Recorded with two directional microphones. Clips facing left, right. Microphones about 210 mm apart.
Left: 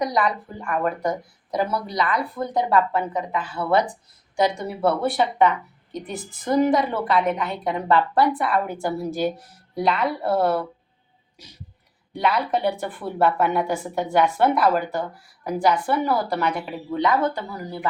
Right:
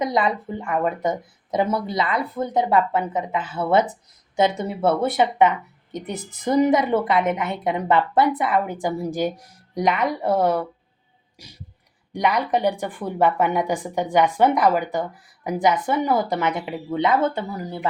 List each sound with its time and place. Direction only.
0.0 s a woman's voice: 25° right (ahead or behind)
12.1 s speech: 15° right (ahead or behind)